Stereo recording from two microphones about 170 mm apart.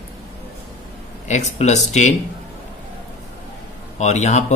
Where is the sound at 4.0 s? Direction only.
45° left (ahead or behind).